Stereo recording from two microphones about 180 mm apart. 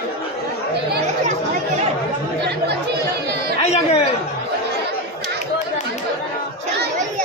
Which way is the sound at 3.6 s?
35° left (ahead or behind).